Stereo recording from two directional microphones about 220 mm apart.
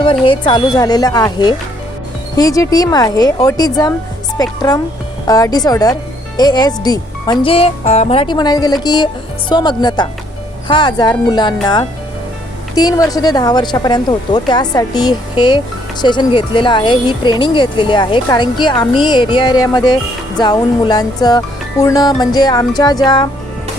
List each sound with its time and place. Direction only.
0.0 s speech: 25° left (ahead or behind)